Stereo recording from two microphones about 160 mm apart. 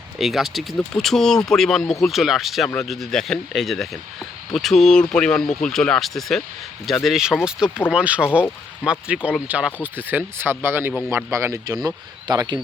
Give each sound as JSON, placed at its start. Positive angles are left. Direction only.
{"t": 0.2, "sound": "speech", "side_deg": 0}